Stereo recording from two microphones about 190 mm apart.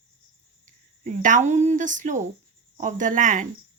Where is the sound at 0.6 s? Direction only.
40° right (ahead or behind).